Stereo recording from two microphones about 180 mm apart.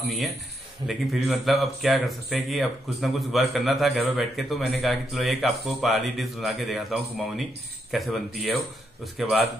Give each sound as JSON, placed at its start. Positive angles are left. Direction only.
{"t": 0.8, "sound": "speech", "side_deg": 0}